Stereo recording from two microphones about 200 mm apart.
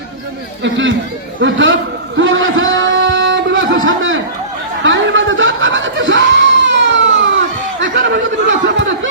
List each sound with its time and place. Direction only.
0.6 s speech: 70° right (ahead or behind)
2.1 s a sound: 75° right (ahead or behind)
4.8 s snicker: 65° right (ahead or behind)
7.8 s chatter: 65° right (ahead or behind)